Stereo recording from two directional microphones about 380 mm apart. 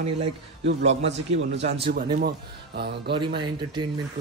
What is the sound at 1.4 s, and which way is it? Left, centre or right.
Speech, right.